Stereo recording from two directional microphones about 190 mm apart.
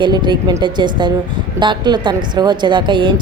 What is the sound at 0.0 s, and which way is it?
A woman's voice, 25° right (ahead or behind).